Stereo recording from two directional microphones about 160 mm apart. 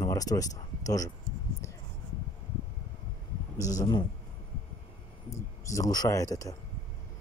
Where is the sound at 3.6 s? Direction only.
20° left (ahead or behind).